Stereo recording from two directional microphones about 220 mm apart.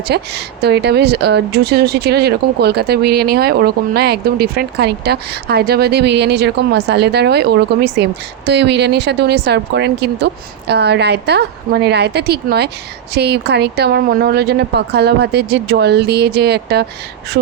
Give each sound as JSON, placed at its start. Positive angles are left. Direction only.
{"t": 0.1, "sound": "speech", "side_deg": -50}